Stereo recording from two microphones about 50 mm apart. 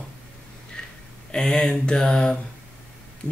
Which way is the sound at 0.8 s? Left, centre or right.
Centre.